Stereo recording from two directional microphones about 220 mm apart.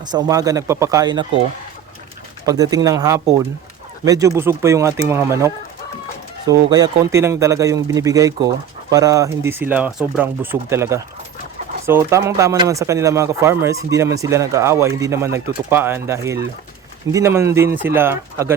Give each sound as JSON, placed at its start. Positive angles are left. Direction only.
{"t": 0.0, "sound": "speech", "side_deg": -20}
{"t": 2.5, "sound": "speech", "side_deg": -15}
{"t": 6.7, "sound": "speech", "side_deg": -15}